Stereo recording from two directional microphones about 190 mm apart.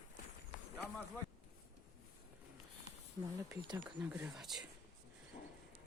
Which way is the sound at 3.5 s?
15° right (ahead or behind).